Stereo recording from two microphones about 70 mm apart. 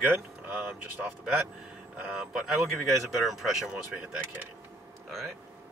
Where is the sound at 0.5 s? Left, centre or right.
Right.